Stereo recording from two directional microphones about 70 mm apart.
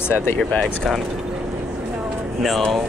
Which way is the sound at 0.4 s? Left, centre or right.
Left.